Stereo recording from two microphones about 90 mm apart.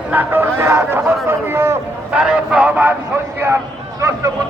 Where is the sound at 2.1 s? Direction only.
10° right (ahead or behind).